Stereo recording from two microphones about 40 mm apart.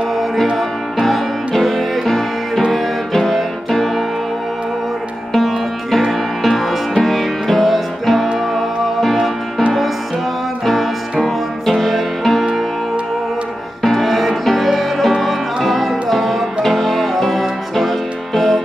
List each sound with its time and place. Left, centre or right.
1.0 s music: centre
5.3 s music: centre
10.6 s music: centre
13.8 s music: centre